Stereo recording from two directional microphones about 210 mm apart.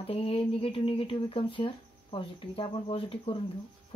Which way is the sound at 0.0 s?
30° left (ahead or behind).